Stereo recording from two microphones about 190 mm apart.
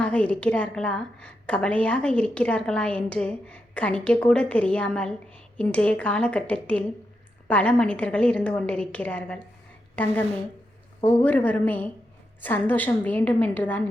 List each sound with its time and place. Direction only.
0.0 s a woman's voice: 5° left (ahead or behind)